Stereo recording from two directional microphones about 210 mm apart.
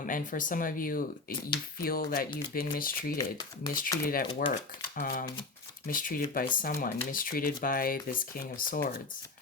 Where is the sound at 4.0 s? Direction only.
45° left (ahead or behind).